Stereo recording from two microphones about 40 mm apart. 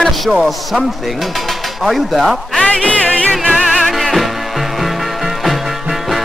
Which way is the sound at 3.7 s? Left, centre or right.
Centre.